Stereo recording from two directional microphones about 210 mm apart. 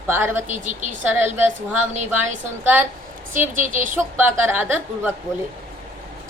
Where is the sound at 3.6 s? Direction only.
40° right (ahead or behind).